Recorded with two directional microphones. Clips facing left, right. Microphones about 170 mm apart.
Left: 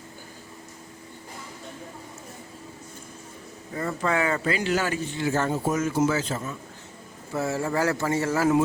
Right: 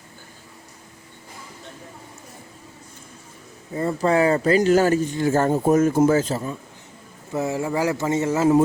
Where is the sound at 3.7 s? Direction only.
30° right (ahead or behind).